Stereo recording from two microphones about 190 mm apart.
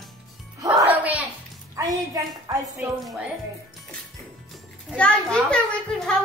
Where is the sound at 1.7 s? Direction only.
15° right (ahead or behind).